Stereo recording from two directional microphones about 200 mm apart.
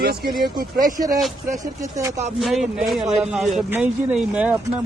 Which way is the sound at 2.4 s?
Centre (ahead or behind).